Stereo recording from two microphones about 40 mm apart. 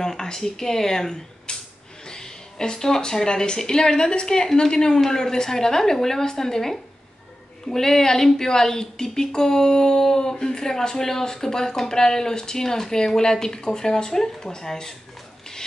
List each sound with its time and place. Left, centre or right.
0.0 s speech: centre